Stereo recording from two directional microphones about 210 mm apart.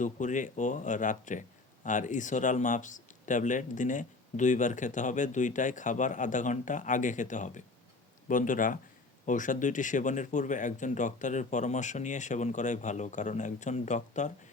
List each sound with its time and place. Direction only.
0.0 s speech: 35° left (ahead or behind)